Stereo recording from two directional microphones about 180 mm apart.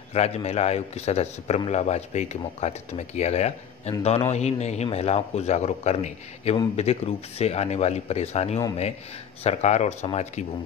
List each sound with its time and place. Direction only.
0.1 s a man's voice: 35° left (ahead or behind)